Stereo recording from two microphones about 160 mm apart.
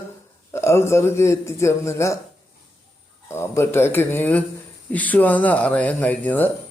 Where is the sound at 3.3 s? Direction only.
15° left (ahead or behind).